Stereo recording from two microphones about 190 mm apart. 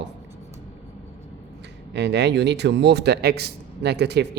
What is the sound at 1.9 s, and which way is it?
A man's voice, 60° right (ahead or behind).